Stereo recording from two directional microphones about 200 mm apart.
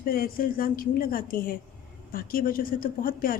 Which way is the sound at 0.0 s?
45° left (ahead or behind).